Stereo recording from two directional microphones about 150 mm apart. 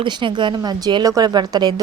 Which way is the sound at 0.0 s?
35° right (ahead or behind).